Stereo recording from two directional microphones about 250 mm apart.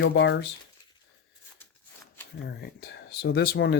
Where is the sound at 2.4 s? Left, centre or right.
Left.